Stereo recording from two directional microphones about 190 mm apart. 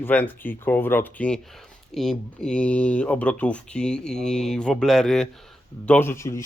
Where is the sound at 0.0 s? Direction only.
10° left (ahead or behind).